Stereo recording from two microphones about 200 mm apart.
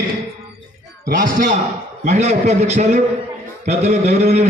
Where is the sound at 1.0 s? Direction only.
45° right (ahead or behind).